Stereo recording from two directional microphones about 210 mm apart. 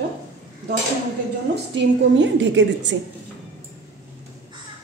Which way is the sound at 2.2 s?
60° right (ahead or behind).